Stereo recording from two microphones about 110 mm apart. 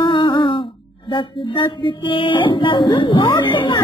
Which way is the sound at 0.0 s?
50° left (ahead or behind).